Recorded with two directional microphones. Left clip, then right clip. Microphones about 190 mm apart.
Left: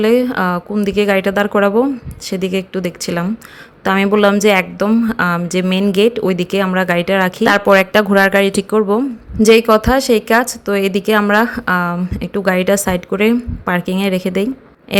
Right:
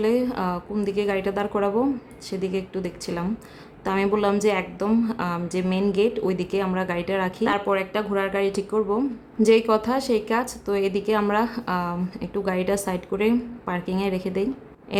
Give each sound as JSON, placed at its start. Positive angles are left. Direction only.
{"t": 0.0, "sound": "speech", "side_deg": 20}